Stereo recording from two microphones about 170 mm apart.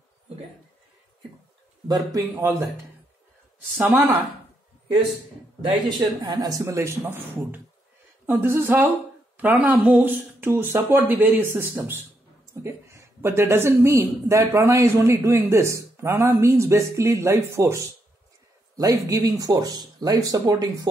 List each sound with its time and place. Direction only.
1.9 s speech: 20° right (ahead or behind)
3.7 s speech: 15° right (ahead or behind)
5.6 s speech: 25° right (ahead or behind)
18.8 s speech: 20° right (ahead or behind)